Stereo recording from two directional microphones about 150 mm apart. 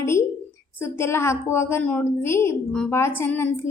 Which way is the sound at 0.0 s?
20° left (ahead or behind).